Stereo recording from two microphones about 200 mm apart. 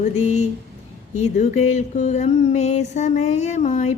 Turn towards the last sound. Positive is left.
turn(degrees=35)  # may be behind; listen again after turning